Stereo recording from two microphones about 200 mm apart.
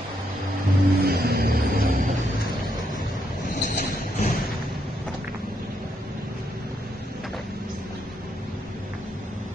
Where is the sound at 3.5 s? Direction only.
40° left (ahead or behind).